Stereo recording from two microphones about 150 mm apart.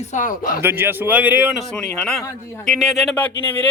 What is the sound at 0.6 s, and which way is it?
Speech, 15° right (ahead or behind).